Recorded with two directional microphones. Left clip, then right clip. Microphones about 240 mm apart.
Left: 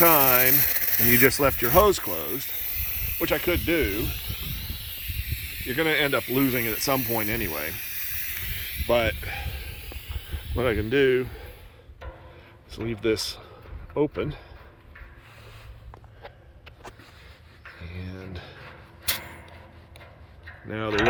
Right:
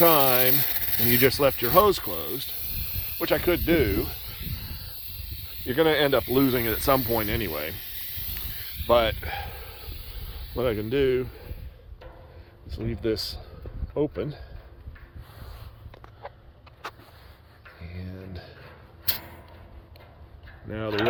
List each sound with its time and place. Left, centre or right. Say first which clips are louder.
0.0 s speech: even; centre
5.1 s snake: left 7 dB; centre
5.6 s speech: right 2 dB; centre
8.9 s snake: right 2 dB; centre
10.6 s speech: left 2 dB; centre
12.7 s speech: left 2 dB; centre
17.8 s a sound: left 1 dB; centre
20.7 s speech: left 2 dB; centre